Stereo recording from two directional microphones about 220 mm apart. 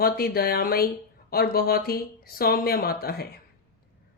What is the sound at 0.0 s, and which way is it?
Speech, 45° left (ahead or behind).